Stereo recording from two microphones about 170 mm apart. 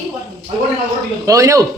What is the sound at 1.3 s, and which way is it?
Speech, 20° right (ahead or behind).